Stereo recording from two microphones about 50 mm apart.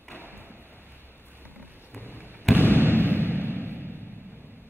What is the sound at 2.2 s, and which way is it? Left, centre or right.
Basketball bounce, right.